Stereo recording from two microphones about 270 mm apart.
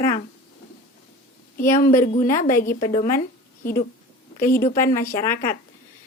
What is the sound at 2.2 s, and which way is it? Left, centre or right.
A woman's voice, left.